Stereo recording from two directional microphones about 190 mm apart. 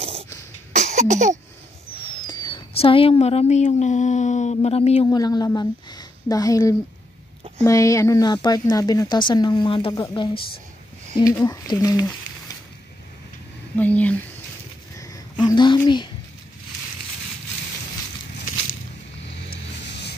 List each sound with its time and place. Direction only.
0.0 s cough: 30° right (ahead or behind)
2.2 s speech: 20° left (ahead or behind)
5.0 s a woman's voice: 20° left (ahead or behind)
11.4 s a woman's voice: 20° left (ahead or behind)
13.7 s speech: 10° left (ahead or behind)
15.0 s a sound: 20° left (ahead or behind)
19.5 s music: 60° left (ahead or behind)